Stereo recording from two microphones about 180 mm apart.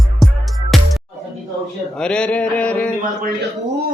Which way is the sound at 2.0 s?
5° left (ahead or behind).